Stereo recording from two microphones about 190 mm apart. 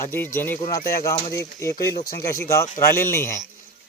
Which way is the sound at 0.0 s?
10° left (ahead or behind).